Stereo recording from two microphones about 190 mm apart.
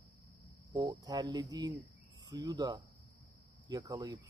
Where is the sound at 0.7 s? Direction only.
20° right (ahead or behind).